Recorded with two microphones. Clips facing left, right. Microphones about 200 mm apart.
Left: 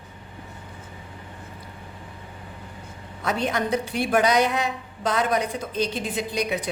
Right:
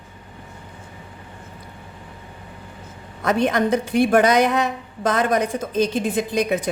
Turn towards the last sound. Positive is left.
turn(degrees=-50)  # may be behind; listen again after turning